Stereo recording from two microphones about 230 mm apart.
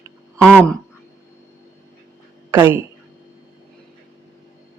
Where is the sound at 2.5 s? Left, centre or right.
Centre.